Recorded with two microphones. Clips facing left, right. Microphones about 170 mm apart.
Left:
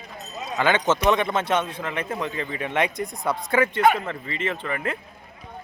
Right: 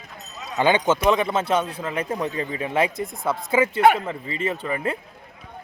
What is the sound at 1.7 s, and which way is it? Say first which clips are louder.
Speech: right 2 dB; 30° right (ahead or behind).